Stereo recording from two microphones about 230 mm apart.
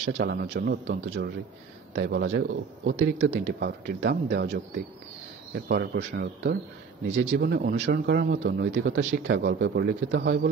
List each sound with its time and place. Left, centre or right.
0.0 s a man's voice: right